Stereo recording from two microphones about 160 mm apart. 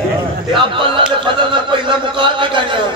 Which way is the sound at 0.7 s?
30° right (ahead or behind).